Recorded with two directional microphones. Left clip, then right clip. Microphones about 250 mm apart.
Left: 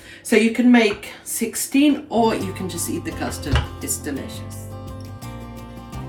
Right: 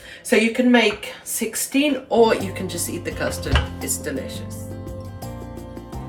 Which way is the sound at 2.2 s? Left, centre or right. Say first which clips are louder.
Right 2 dB; centre.